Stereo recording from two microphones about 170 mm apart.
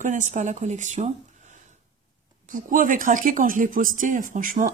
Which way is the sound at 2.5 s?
50° right (ahead or behind).